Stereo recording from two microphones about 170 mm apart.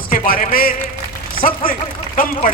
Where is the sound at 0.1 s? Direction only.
55° left (ahead or behind).